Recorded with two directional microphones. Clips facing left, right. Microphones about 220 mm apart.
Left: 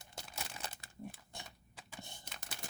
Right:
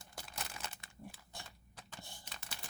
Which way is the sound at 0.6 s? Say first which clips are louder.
Left 1 dB; 35° left (ahead or behind).